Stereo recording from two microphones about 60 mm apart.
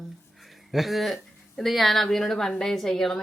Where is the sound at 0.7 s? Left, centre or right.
Centre.